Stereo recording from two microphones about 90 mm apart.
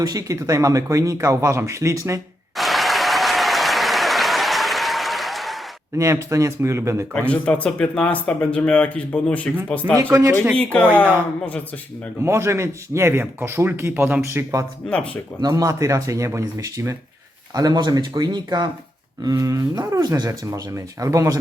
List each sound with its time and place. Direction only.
0.0 s speech: 40° right (ahead or behind)
2.6 s applause: centre (ahead or behind)
6.0 s speech: 40° right (ahead or behind)
7.1 s speech: 15° left (ahead or behind)
10.0 s speech: 35° right (ahead or behind)
10.6 s speech: 15° left (ahead or behind)
12.2 s speech: 30° right (ahead or behind)
14.8 s speech: 15° left (ahead or behind)
15.4 s speech: 45° right (ahead or behind)
17.5 s speech: 50° right (ahead or behind)
19.2 s speech: 40° right (ahead or behind)
20.5 s speech: 35° right (ahead or behind)